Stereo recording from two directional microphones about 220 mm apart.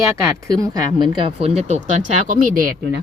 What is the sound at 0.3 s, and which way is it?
Speech, 15° right (ahead or behind).